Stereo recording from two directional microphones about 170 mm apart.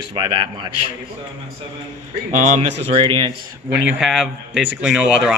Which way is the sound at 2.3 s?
45° right (ahead or behind).